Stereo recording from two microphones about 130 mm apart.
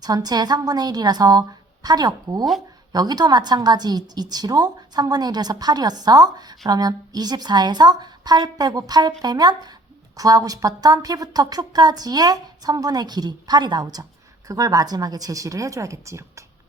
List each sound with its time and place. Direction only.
0.0 s a woman's voice: 30° right (ahead or behind)